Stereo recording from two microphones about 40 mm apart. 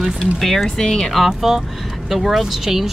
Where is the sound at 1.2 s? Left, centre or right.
Centre.